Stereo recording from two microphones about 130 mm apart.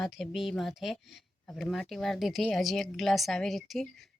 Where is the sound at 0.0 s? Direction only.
Centre (ahead or behind).